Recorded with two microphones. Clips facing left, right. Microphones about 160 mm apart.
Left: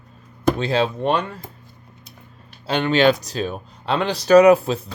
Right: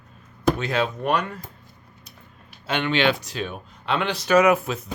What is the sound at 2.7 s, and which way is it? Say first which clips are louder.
Speech: left 5 dB; 40° left (ahead or behind).